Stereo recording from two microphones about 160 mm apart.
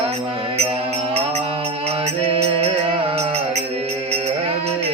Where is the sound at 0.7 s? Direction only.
40° right (ahead or behind).